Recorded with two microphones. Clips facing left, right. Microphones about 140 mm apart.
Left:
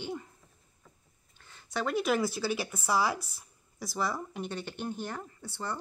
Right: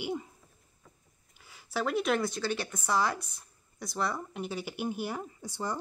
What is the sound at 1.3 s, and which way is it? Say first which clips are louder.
Speech: right 1 dB; 5° right (ahead or behind).